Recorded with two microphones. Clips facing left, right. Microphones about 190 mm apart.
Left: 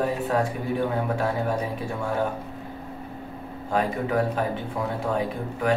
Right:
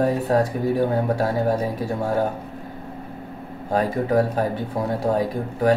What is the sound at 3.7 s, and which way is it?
Speech, 35° right (ahead or behind).